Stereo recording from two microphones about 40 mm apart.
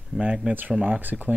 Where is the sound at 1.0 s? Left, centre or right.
Right.